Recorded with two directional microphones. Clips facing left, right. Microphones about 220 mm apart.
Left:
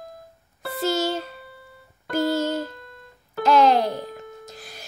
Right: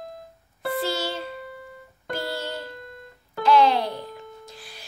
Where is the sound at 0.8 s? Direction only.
45° left (ahead or behind).